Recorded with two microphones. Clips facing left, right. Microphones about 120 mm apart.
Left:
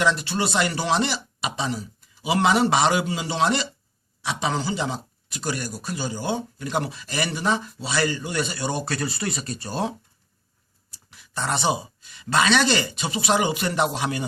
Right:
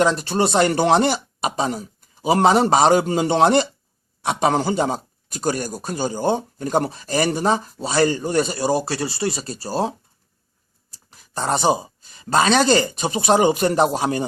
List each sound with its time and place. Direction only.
0.0 s a man's voice: 40° right (ahead or behind)
10.9 s speech: 40° right (ahead or behind)